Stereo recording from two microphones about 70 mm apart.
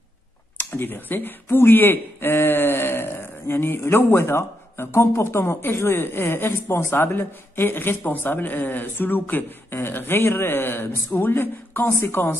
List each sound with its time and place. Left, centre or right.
0.7 s speech: left